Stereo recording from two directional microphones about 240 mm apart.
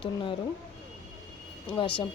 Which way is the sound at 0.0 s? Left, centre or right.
Centre.